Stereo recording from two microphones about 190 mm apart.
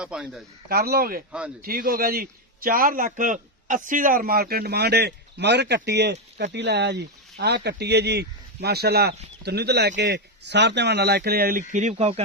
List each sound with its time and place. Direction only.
0.0 s a man's voice: 5° right (ahead or behind)
0.7 s speech: 55° right (ahead or behind)
1.3 s a man's voice: 5° right (ahead or behind)
1.6 s a man's voice: 50° right (ahead or behind)
11.7 s speech: 40° right (ahead or behind)